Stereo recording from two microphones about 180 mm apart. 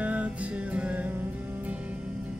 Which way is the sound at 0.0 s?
5° right (ahead or behind).